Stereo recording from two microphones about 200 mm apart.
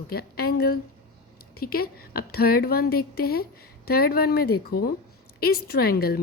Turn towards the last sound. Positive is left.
turn(degrees=50)  # may be behind; listen again after turning